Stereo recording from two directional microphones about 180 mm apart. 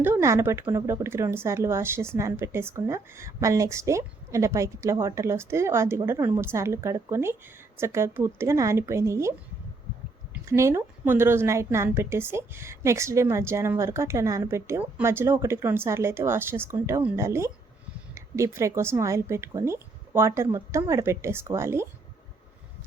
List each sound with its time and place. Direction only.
0.0 s speech: 15° right (ahead or behind)
10.3 s speech: 15° right (ahead or behind)